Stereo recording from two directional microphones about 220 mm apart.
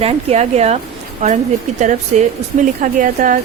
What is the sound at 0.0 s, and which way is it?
Speech, 30° right (ahead or behind).